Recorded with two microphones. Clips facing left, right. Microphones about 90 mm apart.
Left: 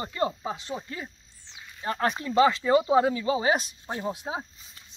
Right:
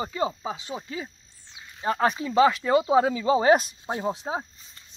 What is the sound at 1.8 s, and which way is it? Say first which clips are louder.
Speech: right 4 dB; 15° right (ahead or behind).